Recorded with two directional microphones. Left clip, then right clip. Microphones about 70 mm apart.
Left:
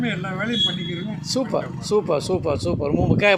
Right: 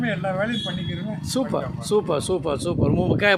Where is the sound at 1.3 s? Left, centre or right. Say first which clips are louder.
Left 2 dB; right.